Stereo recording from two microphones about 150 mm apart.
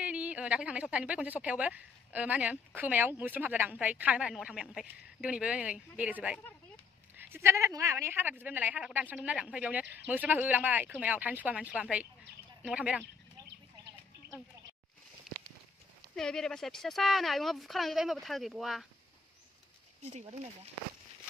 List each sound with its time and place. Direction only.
0.0 s a woman's voice: 10° right (ahead or behind)
16.2 s speech: 5° left (ahead or behind)
20.0 s speech: 50° right (ahead or behind)